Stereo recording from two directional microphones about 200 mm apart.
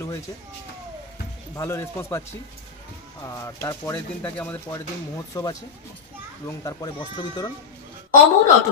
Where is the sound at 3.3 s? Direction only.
15° left (ahead or behind).